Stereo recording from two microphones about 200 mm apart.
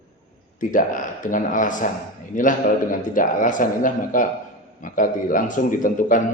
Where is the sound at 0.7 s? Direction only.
40° left (ahead or behind).